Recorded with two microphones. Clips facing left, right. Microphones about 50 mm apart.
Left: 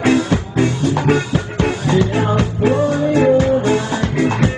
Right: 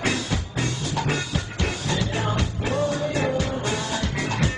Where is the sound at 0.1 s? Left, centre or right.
Left.